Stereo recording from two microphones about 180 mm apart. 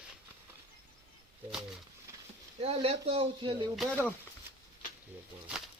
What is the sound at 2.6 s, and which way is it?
Speech, 35° right (ahead or behind).